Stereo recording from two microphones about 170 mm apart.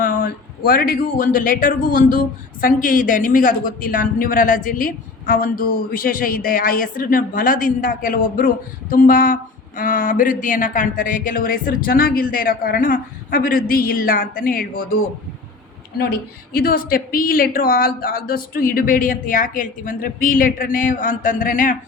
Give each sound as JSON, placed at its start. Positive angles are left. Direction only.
{"t": 0.0, "sound": "speech", "side_deg": 55}
{"t": 16.0, "sound": "speech", "side_deg": 65}